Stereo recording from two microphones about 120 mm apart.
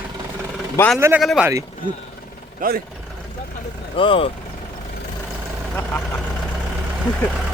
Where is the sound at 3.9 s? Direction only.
50° left (ahead or behind).